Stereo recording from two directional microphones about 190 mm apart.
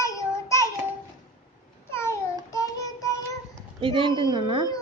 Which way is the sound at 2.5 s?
15° left (ahead or behind).